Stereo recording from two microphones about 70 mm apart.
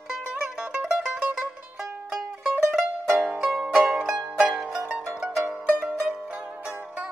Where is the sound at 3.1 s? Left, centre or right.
Centre.